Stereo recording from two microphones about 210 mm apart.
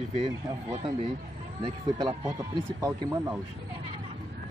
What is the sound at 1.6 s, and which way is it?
Speech, 15° right (ahead or behind).